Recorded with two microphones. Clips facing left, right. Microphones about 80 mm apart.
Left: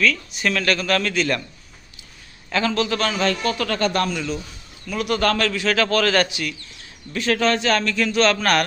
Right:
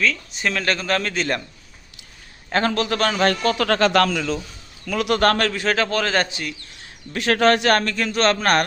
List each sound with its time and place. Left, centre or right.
0.0 s speech: right
2.5 s a man's voice: right
4.9 s a man's voice: right
5.5 s a man's voice: right
5.8 s speech: right
6.2 s a man's voice: right
7.2 s a man's voice: right